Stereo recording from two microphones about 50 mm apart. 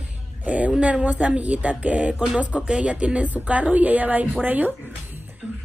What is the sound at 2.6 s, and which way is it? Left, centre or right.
A woman's voice, right.